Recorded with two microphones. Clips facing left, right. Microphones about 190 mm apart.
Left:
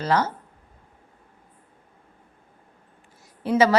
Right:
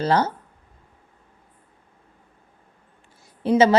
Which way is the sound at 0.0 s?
30° right (ahead or behind).